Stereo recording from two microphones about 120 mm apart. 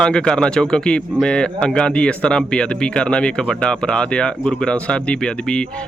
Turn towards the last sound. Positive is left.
turn(degrees=10)  # may be behind; listen again after turning